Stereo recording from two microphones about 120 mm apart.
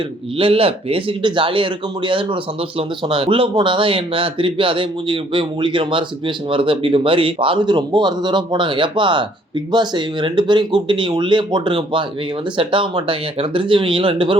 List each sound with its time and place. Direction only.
0.3 s speech: 50° right (ahead or behind)